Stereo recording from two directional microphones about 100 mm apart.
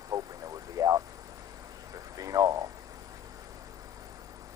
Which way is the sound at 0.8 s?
35° right (ahead or behind).